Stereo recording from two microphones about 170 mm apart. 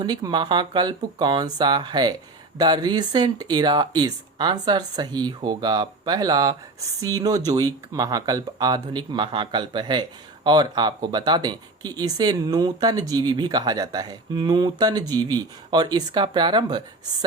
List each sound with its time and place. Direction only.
0.0 s speech: 25° right (ahead or behind)